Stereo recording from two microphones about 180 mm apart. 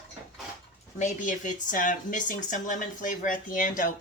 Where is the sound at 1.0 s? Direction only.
45° left (ahead or behind).